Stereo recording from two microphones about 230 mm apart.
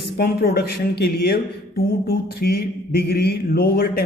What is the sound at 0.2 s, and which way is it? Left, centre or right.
Mantra, left.